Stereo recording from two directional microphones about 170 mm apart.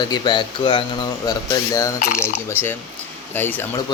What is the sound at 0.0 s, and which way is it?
Speech, 25° left (ahead or behind).